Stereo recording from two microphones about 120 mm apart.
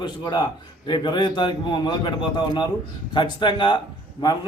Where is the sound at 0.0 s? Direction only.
35° left (ahead or behind).